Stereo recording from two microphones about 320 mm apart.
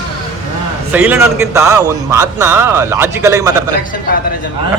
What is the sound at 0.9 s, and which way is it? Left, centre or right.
Speech, centre.